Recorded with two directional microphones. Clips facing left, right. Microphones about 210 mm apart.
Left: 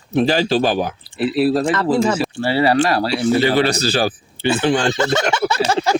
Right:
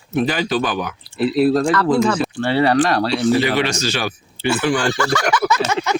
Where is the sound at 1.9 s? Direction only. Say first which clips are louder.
Left 1 dB; 25° left (ahead or behind).